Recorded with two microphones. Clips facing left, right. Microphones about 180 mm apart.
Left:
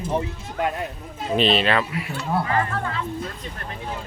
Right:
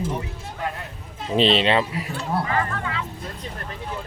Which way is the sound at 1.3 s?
25° right (ahead or behind).